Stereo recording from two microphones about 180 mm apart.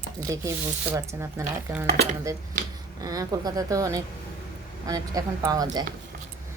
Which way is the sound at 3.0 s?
20° right (ahead or behind).